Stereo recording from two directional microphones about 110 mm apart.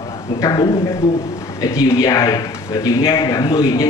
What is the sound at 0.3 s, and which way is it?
Speech, 50° left (ahead or behind).